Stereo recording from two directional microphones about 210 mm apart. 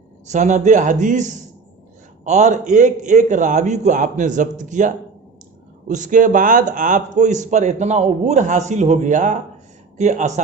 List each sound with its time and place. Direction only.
0.3 s a man's voice: 35° right (ahead or behind)